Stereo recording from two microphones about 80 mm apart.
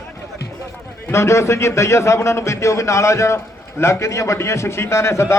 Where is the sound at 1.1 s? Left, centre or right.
Left.